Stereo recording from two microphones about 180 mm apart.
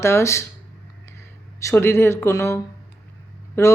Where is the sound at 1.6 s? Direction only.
15° left (ahead or behind).